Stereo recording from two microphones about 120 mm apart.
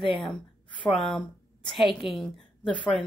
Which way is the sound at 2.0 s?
50° left (ahead or behind).